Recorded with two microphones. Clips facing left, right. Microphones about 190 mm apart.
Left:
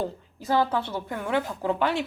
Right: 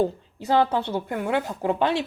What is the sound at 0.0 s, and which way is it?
A woman's voice, 20° right (ahead or behind).